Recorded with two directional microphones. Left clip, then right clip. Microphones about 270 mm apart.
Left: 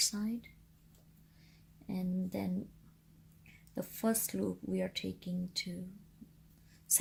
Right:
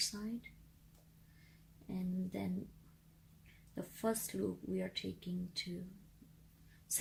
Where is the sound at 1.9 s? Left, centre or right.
Left.